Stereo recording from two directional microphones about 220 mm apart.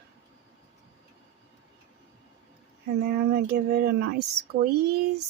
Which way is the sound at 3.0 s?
45° right (ahead or behind).